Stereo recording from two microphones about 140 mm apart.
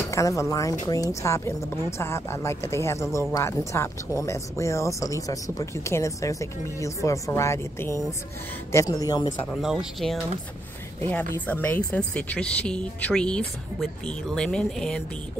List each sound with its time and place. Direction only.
0.1 s speech: 20° left (ahead or behind)
9.6 s speech: 5° right (ahead or behind)
11.1 s a woman's voice: 10° left (ahead or behind)